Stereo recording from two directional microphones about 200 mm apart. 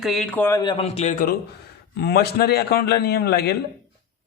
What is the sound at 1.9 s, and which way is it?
A man's voice, 55° left (ahead or behind).